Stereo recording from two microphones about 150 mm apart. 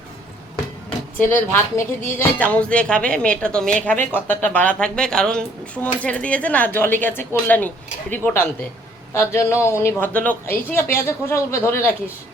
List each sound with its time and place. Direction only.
0.9 s speech: 15° left (ahead or behind)